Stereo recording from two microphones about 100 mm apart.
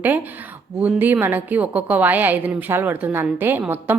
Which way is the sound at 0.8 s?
15° right (ahead or behind).